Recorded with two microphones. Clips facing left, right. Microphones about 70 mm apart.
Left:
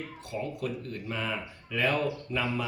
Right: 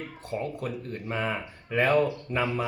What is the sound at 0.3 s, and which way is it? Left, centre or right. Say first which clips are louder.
Speech: right 2 dB; right.